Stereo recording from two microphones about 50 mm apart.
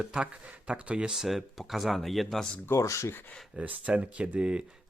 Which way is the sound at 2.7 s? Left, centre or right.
Left.